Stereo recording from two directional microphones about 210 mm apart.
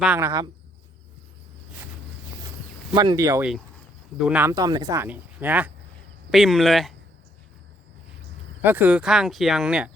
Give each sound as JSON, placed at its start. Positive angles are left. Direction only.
{"t": 0.0, "sound": "speech", "side_deg": -10}
{"t": 2.9, "sound": "speech", "side_deg": -20}
{"t": 4.5, "sound": "speech", "side_deg": -20}
{"t": 8.6, "sound": "speech", "side_deg": -10}